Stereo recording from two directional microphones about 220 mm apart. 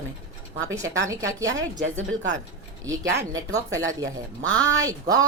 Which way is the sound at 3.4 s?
15° right (ahead or behind).